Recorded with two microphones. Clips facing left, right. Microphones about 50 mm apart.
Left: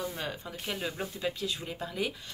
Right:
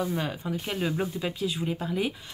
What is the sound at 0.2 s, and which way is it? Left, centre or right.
Speech, centre.